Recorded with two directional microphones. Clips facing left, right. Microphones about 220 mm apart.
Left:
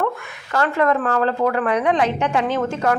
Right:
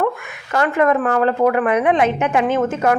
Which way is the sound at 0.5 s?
15° right (ahead or behind).